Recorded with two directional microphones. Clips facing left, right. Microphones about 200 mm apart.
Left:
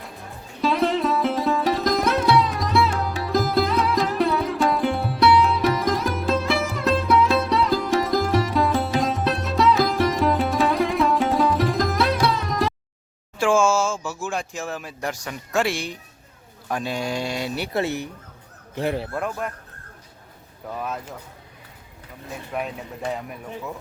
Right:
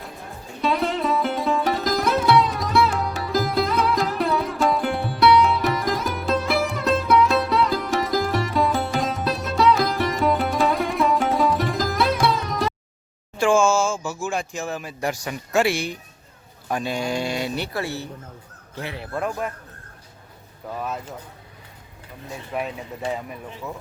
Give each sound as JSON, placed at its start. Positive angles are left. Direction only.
{"t": 0.6, "sound": "sitar", "side_deg": 0}
{"t": 13.4, "sound": "speech", "side_deg": 5}
{"t": 17.7, "sound": "speech", "side_deg": 20}
{"t": 19.3, "sound": "speech", "side_deg": -5}
{"t": 20.7, "sound": "speech", "side_deg": -5}
{"t": 22.5, "sound": "speech", "side_deg": 0}